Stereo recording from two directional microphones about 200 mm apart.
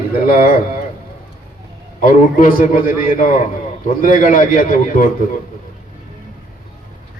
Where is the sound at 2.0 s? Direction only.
45° left (ahead or behind).